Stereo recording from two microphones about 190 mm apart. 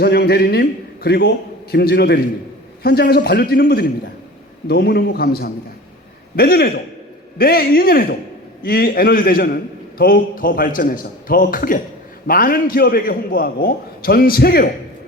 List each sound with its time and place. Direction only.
0.0 s a man's voice: 55° left (ahead or behind)